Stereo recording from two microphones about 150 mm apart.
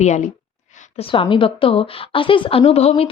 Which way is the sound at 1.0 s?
35° left (ahead or behind).